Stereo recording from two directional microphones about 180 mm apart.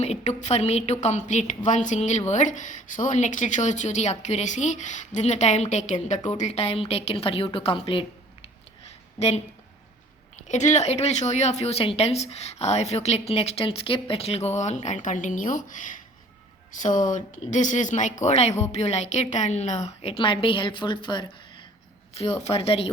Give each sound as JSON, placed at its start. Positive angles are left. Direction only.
{"t": 0.0, "sound": "a woman's voice", "side_deg": 40}